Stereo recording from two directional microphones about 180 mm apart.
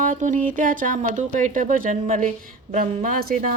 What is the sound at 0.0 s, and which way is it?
Speech, 45° right (ahead or behind).